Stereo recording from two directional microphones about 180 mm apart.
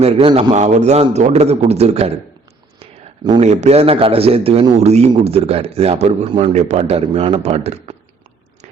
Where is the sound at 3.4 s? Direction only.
35° right (ahead or behind).